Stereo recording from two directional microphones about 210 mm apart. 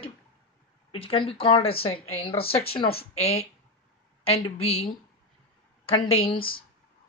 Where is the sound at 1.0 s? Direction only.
25° left (ahead or behind).